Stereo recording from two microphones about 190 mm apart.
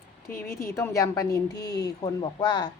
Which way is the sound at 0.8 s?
15° left (ahead or behind).